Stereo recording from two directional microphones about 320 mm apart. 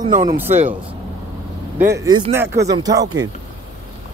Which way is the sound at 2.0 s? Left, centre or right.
Centre.